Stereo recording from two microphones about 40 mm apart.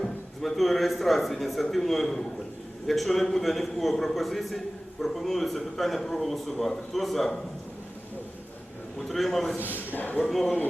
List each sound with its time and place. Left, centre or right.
0.4 s a man's voice: centre
9.0 s a man's voice: centre
9.6 s a man's voice: right
9.9 s speech: left
10.2 s a man's voice: centre